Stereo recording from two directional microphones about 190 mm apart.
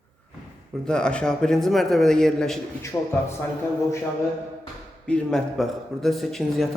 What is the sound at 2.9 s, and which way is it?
Speech, 15° left (ahead or behind).